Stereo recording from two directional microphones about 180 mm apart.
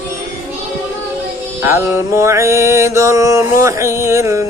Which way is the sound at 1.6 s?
15° right (ahead or behind).